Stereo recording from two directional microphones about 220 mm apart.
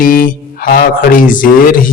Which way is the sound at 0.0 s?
40° left (ahead or behind).